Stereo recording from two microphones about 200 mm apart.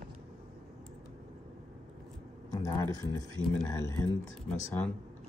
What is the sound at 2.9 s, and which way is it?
Speech, 15° left (ahead or behind).